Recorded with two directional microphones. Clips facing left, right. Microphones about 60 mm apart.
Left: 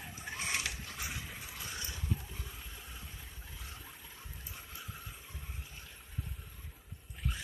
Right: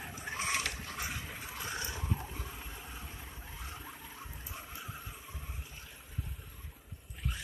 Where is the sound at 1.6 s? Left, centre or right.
Right.